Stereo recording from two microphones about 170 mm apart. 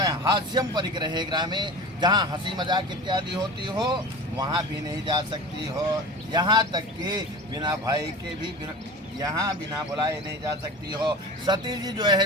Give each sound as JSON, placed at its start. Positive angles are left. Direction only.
{"t": 0.0, "sound": "speech", "side_deg": -20}
{"t": 6.3, "sound": "speech", "side_deg": -25}
{"t": 9.1, "sound": "speech", "side_deg": -20}